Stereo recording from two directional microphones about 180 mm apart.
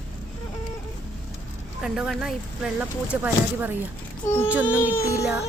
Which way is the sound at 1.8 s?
5° right (ahead or behind).